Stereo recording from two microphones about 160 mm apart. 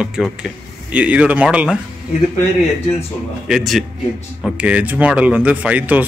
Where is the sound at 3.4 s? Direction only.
Centre (ahead or behind).